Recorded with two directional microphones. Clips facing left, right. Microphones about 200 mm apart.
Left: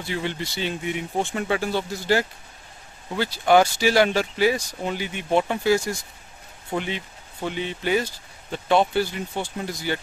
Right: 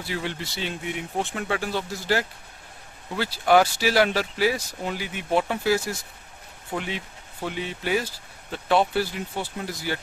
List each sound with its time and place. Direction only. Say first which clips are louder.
0.0 s speech: left 2 dB; centre (ahead or behind)